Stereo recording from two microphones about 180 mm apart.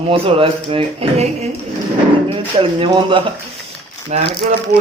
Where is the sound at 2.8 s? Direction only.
30° right (ahead or behind).